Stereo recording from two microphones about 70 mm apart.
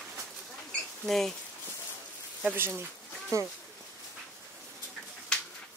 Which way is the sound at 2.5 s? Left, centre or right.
Right.